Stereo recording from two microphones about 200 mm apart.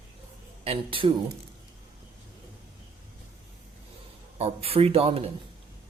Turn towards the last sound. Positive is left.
turn(degrees=-30)  # may be behind; listen again after turning